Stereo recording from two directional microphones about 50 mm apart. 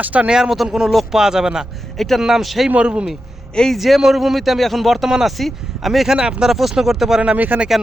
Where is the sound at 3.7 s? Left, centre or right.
Centre.